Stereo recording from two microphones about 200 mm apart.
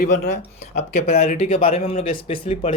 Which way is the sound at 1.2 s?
30° left (ahead or behind).